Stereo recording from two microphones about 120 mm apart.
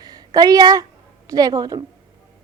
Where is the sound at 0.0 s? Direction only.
35° right (ahead or behind).